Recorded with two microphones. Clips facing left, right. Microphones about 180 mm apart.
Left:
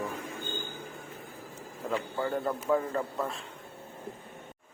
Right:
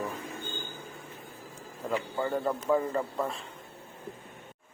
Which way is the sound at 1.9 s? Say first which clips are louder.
Right 1 dB; 5° right (ahead or behind).